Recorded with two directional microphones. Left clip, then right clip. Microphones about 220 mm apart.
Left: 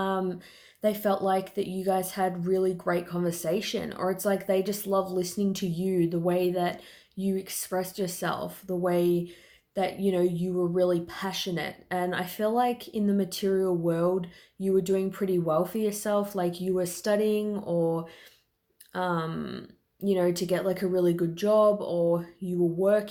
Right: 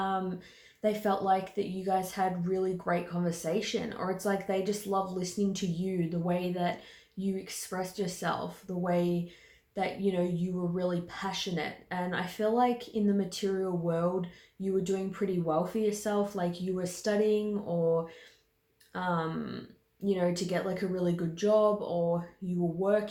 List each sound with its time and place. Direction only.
0.0 s a woman's voice: 45° left (ahead or behind)